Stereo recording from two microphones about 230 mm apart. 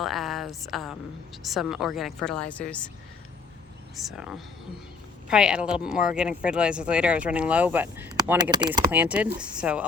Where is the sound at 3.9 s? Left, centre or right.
Centre.